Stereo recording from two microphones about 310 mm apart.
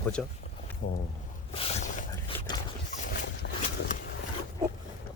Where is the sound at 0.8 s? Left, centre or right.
Left.